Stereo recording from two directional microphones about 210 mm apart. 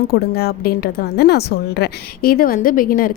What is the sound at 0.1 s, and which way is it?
A woman's voice, 50° left (ahead or behind).